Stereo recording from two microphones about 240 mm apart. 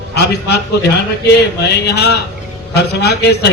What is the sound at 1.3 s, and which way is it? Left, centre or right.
A man's voice, left.